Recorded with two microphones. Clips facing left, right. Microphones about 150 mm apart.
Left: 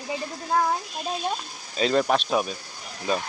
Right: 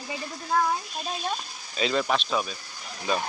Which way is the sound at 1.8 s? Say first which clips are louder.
Left 4 dB; 45° left (ahead or behind).